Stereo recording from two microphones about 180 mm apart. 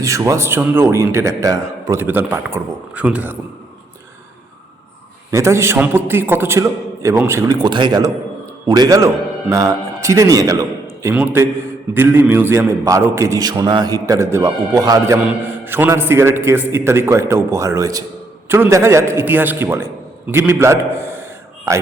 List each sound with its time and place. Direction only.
0.0 s a man's voice: 15° right (ahead or behind)
5.3 s a man's voice: 15° right (ahead or behind)